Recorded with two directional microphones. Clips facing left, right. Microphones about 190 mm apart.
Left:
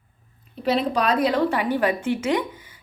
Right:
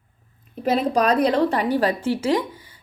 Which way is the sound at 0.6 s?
45° right (ahead or behind).